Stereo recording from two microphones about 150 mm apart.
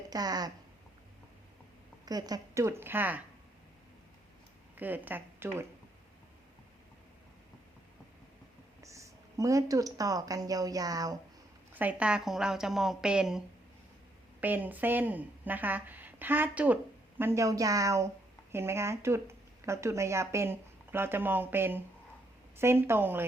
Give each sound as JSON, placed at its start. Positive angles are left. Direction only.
{"t": 0.1, "sound": "a woman's voice", "side_deg": -25}
{"t": 2.0, "sound": "a woman's voice", "side_deg": -25}
{"t": 4.8, "sound": "a woman's voice", "side_deg": -10}
{"t": 8.8, "sound": "speech", "side_deg": -20}
{"t": 11.7, "sound": "speech", "side_deg": -10}
{"t": 14.4, "sound": "a woman's voice", "side_deg": -10}